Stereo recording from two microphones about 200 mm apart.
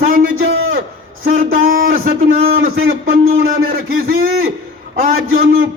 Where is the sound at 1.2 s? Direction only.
45° right (ahead or behind).